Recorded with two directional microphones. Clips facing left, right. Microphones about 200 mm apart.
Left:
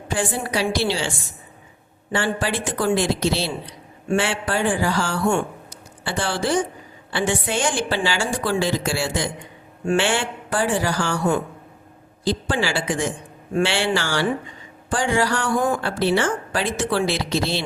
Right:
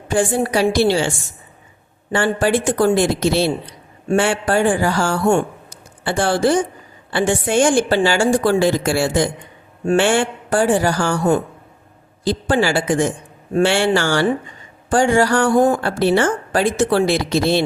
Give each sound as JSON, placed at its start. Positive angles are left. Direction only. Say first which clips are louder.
{"t": 0.1, "sound": "a man's voice", "louder": "right 7 dB", "side_deg": -45}
{"t": 2.1, "sound": "a man's voice", "louder": "right 6 dB", "side_deg": -50}